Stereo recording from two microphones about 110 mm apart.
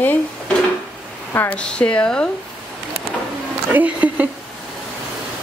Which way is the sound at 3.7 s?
15° right (ahead or behind).